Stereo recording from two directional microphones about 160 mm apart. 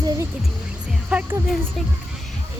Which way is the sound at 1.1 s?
10° right (ahead or behind).